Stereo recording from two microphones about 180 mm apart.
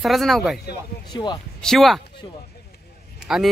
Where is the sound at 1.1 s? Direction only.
25° left (ahead or behind).